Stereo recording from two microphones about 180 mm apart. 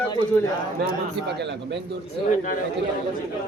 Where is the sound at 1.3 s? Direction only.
70° right (ahead or behind).